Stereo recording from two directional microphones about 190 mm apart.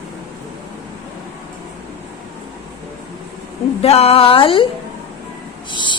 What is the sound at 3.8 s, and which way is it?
Speech, 30° left (ahead or behind).